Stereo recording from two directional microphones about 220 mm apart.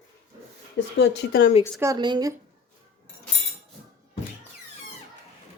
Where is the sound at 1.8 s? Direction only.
15° right (ahead or behind).